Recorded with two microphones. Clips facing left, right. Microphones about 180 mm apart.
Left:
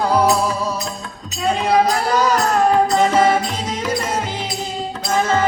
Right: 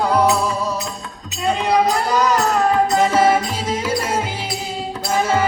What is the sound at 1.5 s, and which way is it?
Music, centre (ahead or behind).